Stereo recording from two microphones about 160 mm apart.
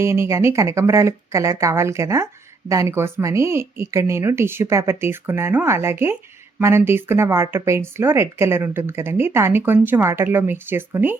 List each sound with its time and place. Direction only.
0.0 s speech: 15° right (ahead or behind)